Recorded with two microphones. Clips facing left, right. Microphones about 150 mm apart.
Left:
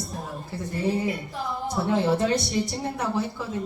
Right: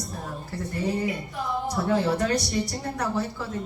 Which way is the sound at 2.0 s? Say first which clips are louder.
Left 2 dB; 25° left (ahead or behind).